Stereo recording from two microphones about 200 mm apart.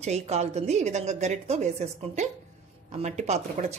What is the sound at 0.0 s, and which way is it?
A woman's voice, 35° right (ahead or behind).